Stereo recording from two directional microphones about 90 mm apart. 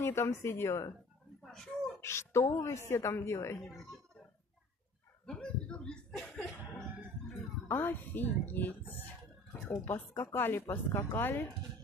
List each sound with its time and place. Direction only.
0.0 s a woman's voice: 30° left (ahead or behind)
1.4 s a sound: 5° left (ahead or behind)
2.0 s a woman's voice: 30° left (ahead or behind)
5.2 s speech: 10° left (ahead or behind)
7.2 s a woman's voice: 25° left (ahead or behind)